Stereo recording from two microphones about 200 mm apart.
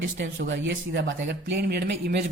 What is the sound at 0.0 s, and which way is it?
A woman's voice, 65° right (ahead or behind).